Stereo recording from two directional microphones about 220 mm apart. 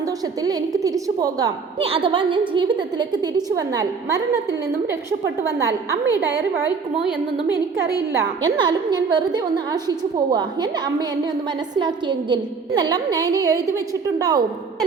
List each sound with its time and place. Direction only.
0.4 s a woman's voice: 15° right (ahead or behind)
5.5 s a woman's voice: 15° right (ahead or behind)
8.4 s a woman's voice: 20° right (ahead or behind)
11.7 s a woman's voice: 20° right (ahead or behind)